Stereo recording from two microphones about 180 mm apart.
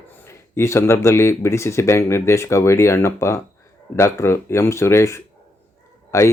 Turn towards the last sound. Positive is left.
turn(degrees=15)  # may be behind; listen again after turning